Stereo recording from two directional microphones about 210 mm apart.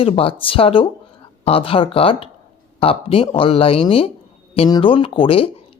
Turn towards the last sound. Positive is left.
turn(degrees=25)  # may be behind; listen again after turning